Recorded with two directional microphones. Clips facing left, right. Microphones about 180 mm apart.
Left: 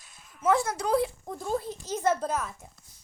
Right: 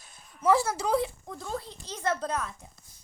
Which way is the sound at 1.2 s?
20° left (ahead or behind).